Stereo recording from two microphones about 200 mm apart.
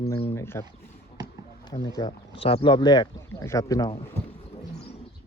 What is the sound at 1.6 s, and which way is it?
Speech, 20° left (ahead or behind).